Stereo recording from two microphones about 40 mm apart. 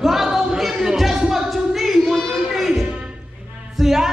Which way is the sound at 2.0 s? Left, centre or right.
Centre.